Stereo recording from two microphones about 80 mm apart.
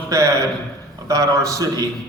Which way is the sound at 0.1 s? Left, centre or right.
Right.